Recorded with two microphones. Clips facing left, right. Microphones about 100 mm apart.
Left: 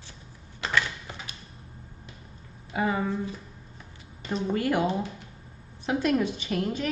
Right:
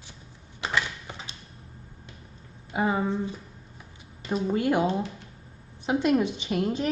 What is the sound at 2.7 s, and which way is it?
Speech, 20° right (ahead or behind).